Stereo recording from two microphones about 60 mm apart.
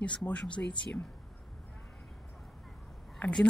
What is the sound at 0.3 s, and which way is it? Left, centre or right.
Speech, left.